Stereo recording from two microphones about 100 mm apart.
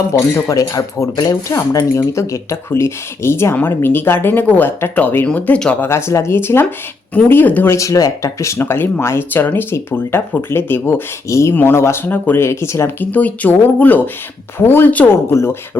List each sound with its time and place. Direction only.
0.1 s speech: 30° left (ahead or behind)
1.1 s speech: 45° left (ahead or behind)
1.5 s speech: 30° left (ahead or behind); by 5.7 s 10° left (ahead or behind)
5.8 s speech: 25° left (ahead or behind)
7.7 s speech: 30° left (ahead or behind)